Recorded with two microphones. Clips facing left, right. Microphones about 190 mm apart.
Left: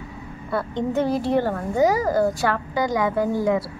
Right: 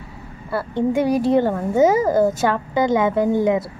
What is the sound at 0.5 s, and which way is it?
A woman's voice, 5° right (ahead or behind).